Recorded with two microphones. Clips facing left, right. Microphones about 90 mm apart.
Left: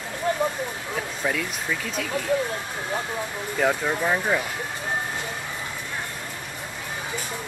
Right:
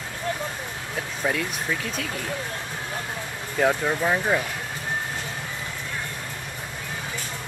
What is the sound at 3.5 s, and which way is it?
Speech, 5° right (ahead or behind).